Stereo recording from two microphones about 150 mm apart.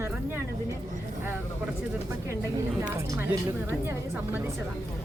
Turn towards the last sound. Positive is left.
turn(degrees=-15)  # may be behind; listen again after turning